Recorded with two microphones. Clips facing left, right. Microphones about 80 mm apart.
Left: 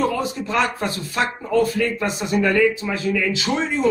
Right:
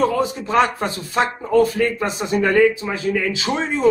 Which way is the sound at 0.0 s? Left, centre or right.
Right.